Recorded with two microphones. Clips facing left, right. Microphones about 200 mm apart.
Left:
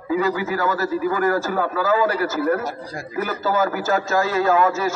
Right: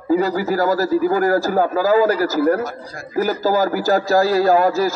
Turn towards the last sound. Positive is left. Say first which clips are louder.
# right 3 dB
turn(degrees=-40)  # may be behind; listen again after turning